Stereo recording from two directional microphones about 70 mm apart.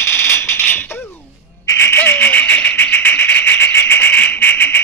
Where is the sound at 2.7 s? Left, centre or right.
Left.